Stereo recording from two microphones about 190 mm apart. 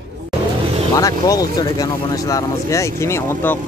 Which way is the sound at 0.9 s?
20° left (ahead or behind).